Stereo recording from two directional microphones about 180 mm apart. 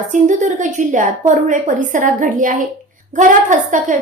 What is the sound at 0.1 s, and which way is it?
A woman's voice, 45° right (ahead or behind).